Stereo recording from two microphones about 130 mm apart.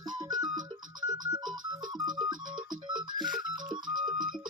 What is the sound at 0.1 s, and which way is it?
Music, 30° right (ahead or behind).